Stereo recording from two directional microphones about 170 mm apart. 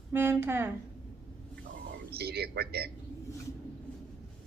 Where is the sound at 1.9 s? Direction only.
70° right (ahead or behind).